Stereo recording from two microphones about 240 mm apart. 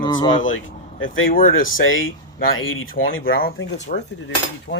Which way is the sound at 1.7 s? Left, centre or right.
Left.